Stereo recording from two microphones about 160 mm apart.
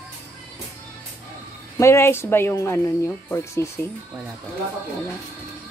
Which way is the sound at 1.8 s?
15° left (ahead or behind).